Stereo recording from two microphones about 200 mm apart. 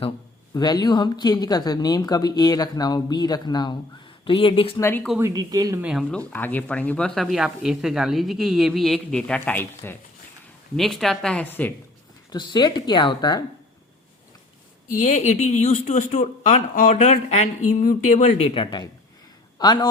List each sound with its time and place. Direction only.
0.5 s speech: 20° left (ahead or behind)
4.8 s speech: 10° left (ahead or behind)
5.2 s speech: 20° right (ahead or behind)
5.8 s speech: centre (ahead or behind)
12.3 s speech: 20° left (ahead or behind)
14.8 s speech: 40° left (ahead or behind); by 19.9 s 20° left (ahead or behind)